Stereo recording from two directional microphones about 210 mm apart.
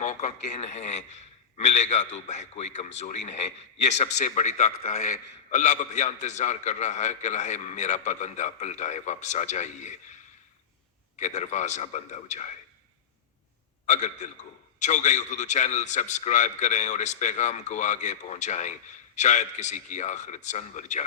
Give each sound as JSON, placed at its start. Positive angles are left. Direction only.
{"t": 0.0, "sound": "a man's voice", "side_deg": 35}
{"t": 11.2, "sound": "a man's voice", "side_deg": 35}
{"t": 13.8, "sound": "a man's voice", "side_deg": 35}